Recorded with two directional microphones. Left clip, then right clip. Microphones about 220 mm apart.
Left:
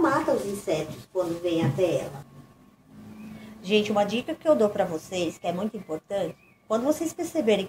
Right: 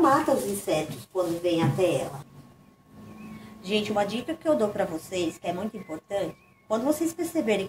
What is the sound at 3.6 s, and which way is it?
Speech, 25° left (ahead or behind).